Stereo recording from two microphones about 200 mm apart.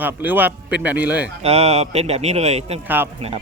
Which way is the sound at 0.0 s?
10° right (ahead or behind).